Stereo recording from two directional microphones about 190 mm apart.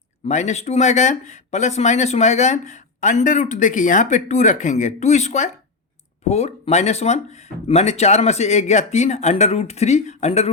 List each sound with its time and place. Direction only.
0.3 s speech: 35° left (ahead or behind)